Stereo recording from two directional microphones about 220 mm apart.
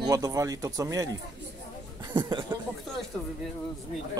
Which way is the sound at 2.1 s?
20° right (ahead or behind).